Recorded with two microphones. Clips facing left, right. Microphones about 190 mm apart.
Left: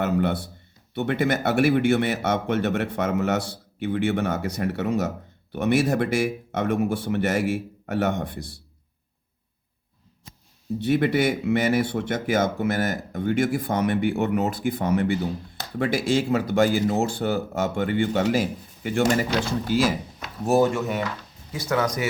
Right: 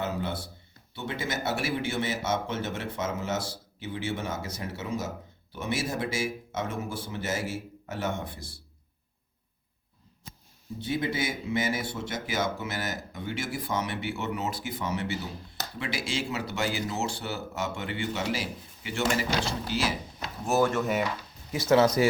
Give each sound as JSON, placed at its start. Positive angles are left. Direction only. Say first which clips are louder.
{"t": 0.0, "sound": "a man's voice", "louder": "left 8 dB", "side_deg": 60}
{"t": 10.8, "sound": "a man's voice", "louder": "left 9 dB", "side_deg": 65}